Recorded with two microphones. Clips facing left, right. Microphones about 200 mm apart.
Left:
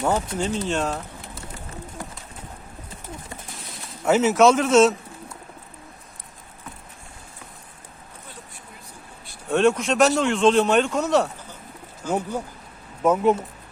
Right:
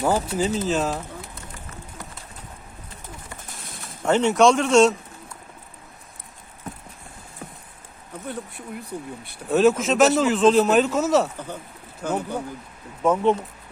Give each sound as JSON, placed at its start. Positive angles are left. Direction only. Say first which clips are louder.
{"t": 0.0, "sound": "a man's voice", "louder": "right 2 dB", "side_deg": -5}
{"t": 4.0, "sound": "a man's voice", "louder": "left 1 dB", "side_deg": 5}
{"t": 8.3, "sound": "speech", "louder": "right 14 dB", "side_deg": -60}
{"t": 9.5, "sound": "a man's voice", "louder": "right 1 dB", "side_deg": -5}
{"t": 12.0, "sound": "speech", "louder": "left 1 dB", "side_deg": -60}
{"t": 13.0, "sound": "speech", "louder": "left 1 dB", "side_deg": 5}